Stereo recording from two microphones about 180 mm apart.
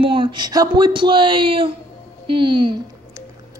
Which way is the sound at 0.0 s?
30° right (ahead or behind).